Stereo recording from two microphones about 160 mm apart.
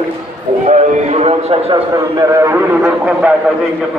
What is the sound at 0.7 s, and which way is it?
Speech, 45° right (ahead or behind).